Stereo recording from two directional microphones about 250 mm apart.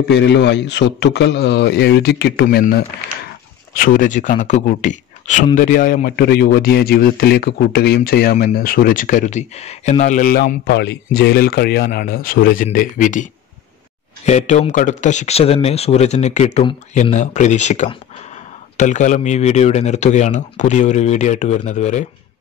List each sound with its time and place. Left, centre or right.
0.1 s a man's voice: left